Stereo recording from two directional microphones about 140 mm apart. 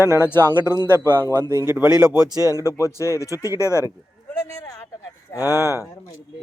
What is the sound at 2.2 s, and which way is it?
Speech, 25° right (ahead or behind).